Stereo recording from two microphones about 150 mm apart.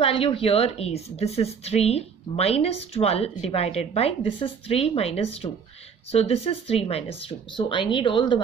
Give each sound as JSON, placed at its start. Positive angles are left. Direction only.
{"t": 0.0, "sound": "a woman's voice", "side_deg": 35}